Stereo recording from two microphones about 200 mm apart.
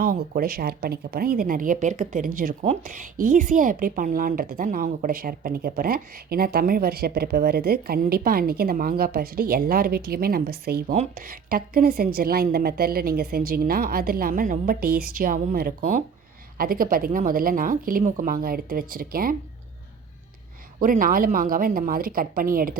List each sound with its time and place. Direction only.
0.0 s speech: 45° right (ahead or behind)
10.9 s speech: 40° right (ahead or behind)
20.7 s speech: 45° right (ahead or behind)